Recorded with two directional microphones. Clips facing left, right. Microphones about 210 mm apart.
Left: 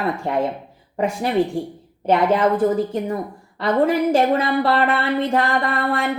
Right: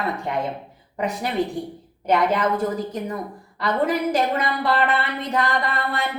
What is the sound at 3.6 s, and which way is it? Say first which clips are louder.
Speech: left 4 dB; 30° left (ahead or behind).